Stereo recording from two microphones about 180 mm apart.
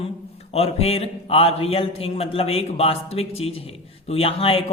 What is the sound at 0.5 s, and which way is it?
A man's voice, 35° left (ahead or behind).